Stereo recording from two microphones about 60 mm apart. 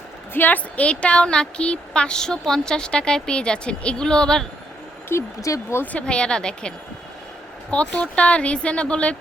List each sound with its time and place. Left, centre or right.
0.3 s speech: left; by 4.4 s centre
5.1 s speech: left
5.5 s speech: left
5.8 s speech: left